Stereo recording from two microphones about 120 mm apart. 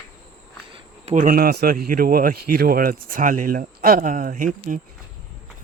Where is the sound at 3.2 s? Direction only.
90° right.